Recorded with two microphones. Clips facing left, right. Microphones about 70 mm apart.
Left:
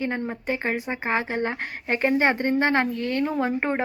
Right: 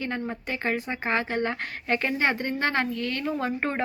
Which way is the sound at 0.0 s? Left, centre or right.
Left.